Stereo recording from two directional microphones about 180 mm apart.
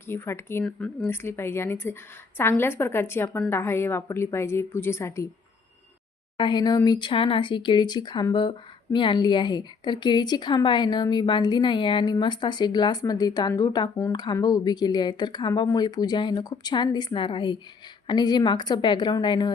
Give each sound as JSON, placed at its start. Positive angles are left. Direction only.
{"t": 0.1, "sound": "speech", "side_deg": 15}
{"t": 6.3, "sound": "speech", "side_deg": 25}